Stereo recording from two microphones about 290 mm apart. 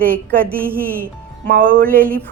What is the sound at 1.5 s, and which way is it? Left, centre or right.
Speech, right.